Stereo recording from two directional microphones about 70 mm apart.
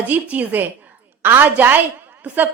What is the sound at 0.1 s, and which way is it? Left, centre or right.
A woman's voice, right.